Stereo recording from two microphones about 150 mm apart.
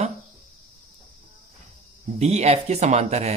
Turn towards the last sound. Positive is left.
turn(degrees=-45)  # may be behind; listen again after turning